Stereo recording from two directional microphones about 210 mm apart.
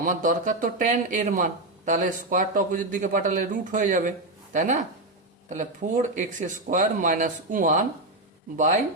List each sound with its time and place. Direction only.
0.0 s a man's voice: 40° right (ahead or behind)